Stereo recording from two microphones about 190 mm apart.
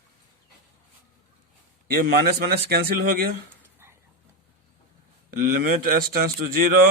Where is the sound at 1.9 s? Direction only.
55° right (ahead or behind).